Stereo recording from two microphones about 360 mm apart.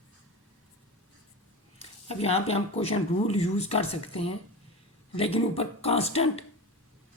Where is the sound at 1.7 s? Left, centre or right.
Centre.